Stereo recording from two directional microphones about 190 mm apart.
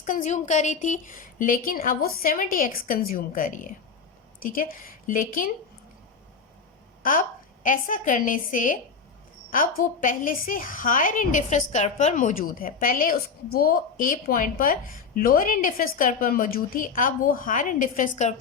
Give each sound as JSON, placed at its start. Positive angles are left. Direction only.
{"t": 0.0, "sound": "a woman's voice", "side_deg": 40}
{"t": 7.0, "sound": "a woman's voice", "side_deg": 45}